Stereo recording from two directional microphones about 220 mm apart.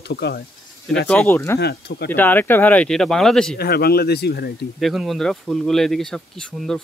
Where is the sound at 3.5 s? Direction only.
45° left (ahead or behind).